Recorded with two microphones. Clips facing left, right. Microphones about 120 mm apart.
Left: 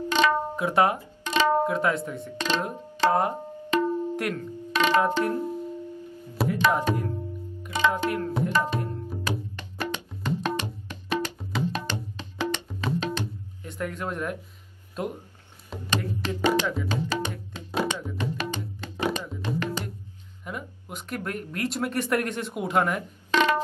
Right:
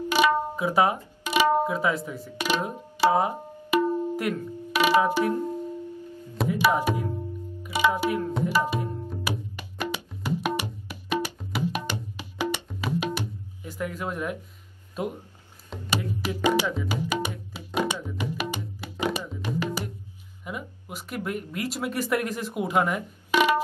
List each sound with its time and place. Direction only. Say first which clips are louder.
0.1 s music: right 1 dB; 10° right (ahead or behind)
6.3 s tabla: even; centre (ahead or behind)
7.6 s music: right 1 dB; 10° right (ahead or behind)
8.5 s tabla: right 2 dB; 10° right (ahead or behind)
9.3 s music: left 2 dB; 10° right (ahead or behind)
15.9 s music: even; 10° right (ahead or behind)
20.4 s speech: even; 5° right (ahead or behind)